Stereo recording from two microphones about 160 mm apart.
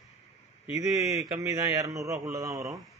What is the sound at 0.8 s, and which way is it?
A man's voice, 20° right (ahead or behind).